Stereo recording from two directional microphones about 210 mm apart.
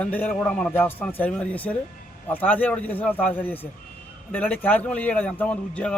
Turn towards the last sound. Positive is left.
turn(degrees=5)  # may be behind; listen again after turning